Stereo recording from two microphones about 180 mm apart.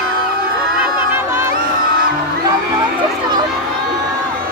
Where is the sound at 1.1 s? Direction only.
15° right (ahead or behind).